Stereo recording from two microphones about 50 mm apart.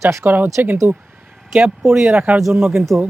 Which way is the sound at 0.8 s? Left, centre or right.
Right.